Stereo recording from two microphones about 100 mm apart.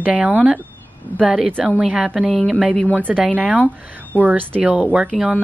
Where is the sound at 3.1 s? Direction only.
15° right (ahead or behind).